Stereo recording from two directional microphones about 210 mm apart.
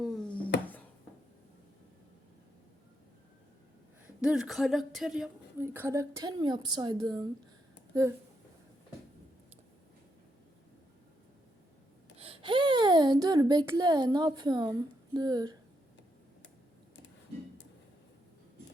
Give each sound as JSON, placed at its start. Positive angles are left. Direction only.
{"t": 0.0, "sound": "a sound", "side_deg": 0}
{"t": 4.0, "sound": "speech", "side_deg": -5}
{"t": 12.1, "sound": "speech", "side_deg": -30}